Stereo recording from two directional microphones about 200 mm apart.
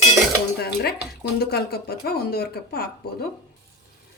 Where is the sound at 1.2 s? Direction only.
50° left (ahead or behind).